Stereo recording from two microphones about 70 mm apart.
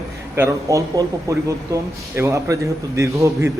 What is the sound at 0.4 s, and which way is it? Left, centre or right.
Speech, right.